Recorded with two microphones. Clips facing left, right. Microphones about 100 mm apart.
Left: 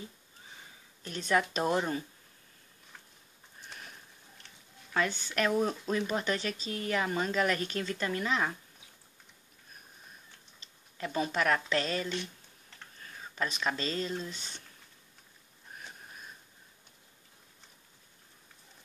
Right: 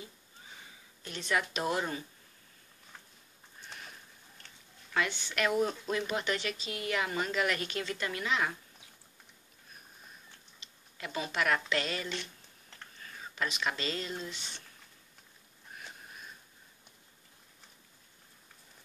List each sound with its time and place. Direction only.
1.0 s a woman's voice: 40° left (ahead or behind)
4.9 s a woman's voice: 35° left (ahead or behind)
10.6 s speech: 40° left (ahead or behind)
13.4 s a woman's voice: 35° left (ahead or behind)